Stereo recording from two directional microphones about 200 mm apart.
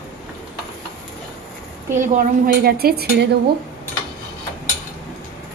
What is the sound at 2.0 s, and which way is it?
Speech, 45° right (ahead or behind).